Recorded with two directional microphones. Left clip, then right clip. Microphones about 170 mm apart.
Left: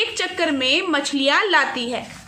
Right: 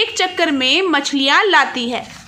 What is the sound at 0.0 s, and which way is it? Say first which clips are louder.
A woman's voice: right 5 dB; 30° right (ahead or behind).